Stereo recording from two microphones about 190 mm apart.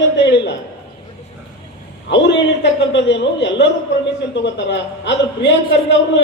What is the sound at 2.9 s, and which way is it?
A woman's voice, 70° left (ahead or behind).